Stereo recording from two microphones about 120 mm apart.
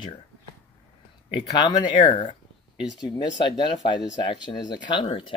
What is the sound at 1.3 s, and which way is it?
Speech, 40° left (ahead or behind).